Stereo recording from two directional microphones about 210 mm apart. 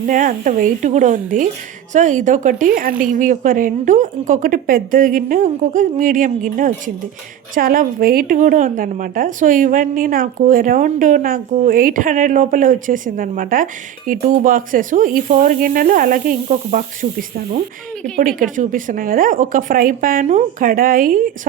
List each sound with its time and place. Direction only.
0.0 s a woman's voice: 40° right (ahead or behind)
18.2 s a woman's voice: 40° right (ahead or behind)